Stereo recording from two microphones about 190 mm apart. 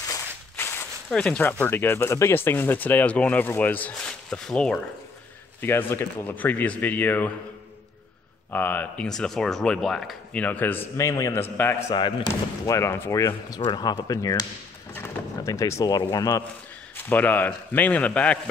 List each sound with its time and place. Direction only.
0.1 s speech: 10° left (ahead or behind)
8.5 s speech: 10° left (ahead or behind)
11.9 s speech: 25° left (ahead or behind); by 18.4 s 5° left (ahead or behind)